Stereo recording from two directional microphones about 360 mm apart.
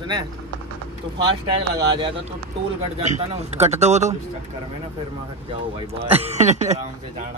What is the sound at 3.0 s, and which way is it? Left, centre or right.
A man's voice, centre.